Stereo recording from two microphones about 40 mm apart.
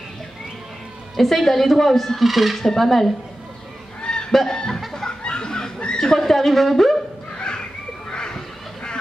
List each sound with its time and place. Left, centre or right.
1.1 s speech: centre
4.0 s fowl: left
4.5 s music: centre
4.9 s a sound: centre
7.3 s children playing: left
8.1 s cat: centre